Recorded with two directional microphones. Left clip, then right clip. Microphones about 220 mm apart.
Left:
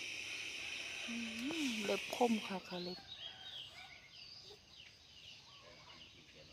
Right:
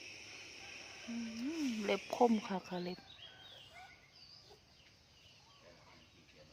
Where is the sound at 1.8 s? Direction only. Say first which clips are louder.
Right 5 dB; 20° right (ahead or behind).